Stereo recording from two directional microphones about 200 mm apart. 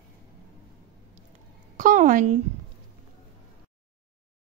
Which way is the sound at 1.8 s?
40° right (ahead or behind).